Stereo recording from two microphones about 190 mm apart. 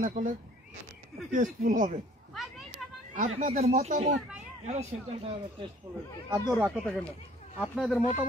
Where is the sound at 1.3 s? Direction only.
45° right (ahead or behind).